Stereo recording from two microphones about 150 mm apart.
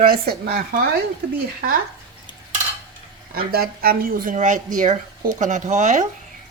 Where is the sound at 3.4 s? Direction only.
90° right; by 6.0 s 50° right (ahead or behind).